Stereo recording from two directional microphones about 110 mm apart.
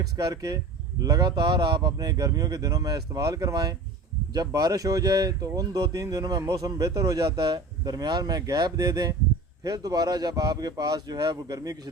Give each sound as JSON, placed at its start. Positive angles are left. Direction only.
{"t": 0.0, "sound": "speech", "side_deg": -35}